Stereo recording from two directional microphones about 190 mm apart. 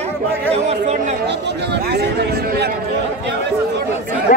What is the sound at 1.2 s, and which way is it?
Speech, 65° right (ahead or behind).